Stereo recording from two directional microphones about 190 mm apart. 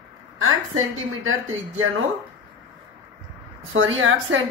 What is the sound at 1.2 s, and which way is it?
Speech, 90° right.